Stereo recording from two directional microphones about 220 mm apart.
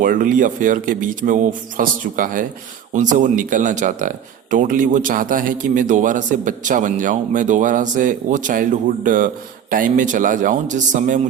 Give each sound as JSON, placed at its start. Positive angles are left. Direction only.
{"t": 0.0, "sound": "a man's voice", "side_deg": -40}